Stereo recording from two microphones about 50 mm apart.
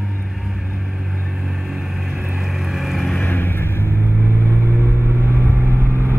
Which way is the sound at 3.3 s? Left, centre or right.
Left.